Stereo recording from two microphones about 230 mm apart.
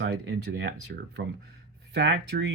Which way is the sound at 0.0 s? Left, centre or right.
Right.